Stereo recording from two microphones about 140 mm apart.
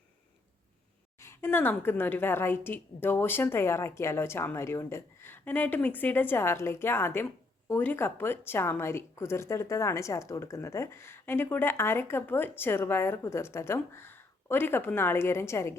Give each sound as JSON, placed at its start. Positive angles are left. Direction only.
{"t": 1.2, "sound": "a woman's voice", "side_deg": 20}